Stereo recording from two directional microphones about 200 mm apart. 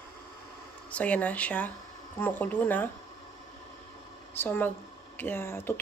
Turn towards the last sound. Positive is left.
turn(degrees=10)  # may be behind; listen again after turning